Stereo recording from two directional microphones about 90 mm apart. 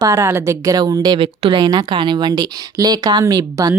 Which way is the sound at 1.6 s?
50° right (ahead or behind).